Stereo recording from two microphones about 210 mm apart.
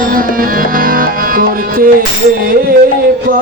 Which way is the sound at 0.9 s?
45° right (ahead or behind).